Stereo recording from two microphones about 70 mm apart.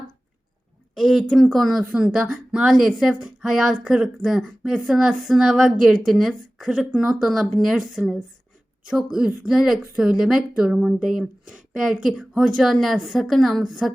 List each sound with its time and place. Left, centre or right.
0.9 s speech: centre